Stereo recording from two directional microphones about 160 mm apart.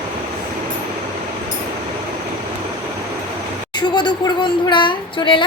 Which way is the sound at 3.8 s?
30° left (ahead or behind).